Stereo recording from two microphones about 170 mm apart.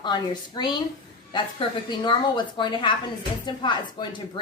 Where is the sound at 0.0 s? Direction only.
25° left (ahead or behind).